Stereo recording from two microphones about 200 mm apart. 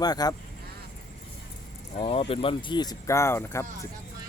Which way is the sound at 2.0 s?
30° left (ahead or behind).